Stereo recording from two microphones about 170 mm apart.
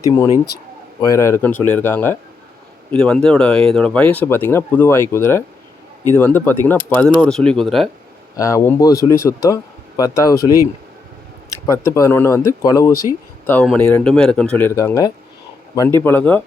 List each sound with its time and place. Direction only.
1.0 s speech: 15° left (ahead or behind); by 7.9 s centre (ahead or behind)
8.4 s speech: 20° left (ahead or behind)
11.6 s speech: 15° left (ahead or behind)